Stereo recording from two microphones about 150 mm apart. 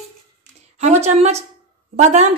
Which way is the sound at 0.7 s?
50° right (ahead or behind).